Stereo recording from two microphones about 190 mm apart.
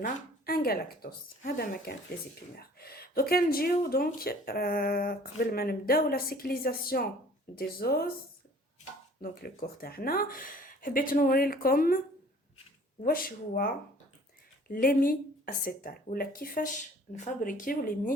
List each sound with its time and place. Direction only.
0.0 s a woman's voice: 50° left (ahead or behind)
9.2 s speech: 50° left (ahead or behind)
13.0 s speech: 50° left (ahead or behind)